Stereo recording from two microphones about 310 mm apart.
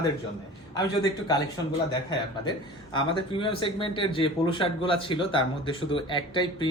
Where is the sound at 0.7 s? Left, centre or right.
Centre.